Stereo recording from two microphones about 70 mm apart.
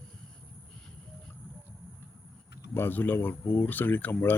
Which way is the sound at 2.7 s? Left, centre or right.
Left.